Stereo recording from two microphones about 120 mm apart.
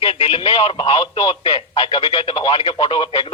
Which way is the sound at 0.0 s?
50° left (ahead or behind).